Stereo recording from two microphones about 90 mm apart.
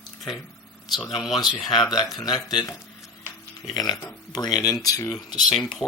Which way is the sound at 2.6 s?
35° left (ahead or behind).